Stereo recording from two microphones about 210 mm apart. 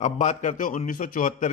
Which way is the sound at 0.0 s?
35° left (ahead or behind).